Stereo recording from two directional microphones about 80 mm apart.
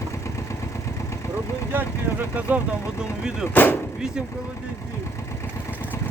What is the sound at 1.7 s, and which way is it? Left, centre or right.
Speech, right.